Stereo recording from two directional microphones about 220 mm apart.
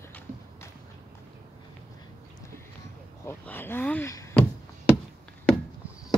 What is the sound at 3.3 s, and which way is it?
Speech, 10° left (ahead or behind).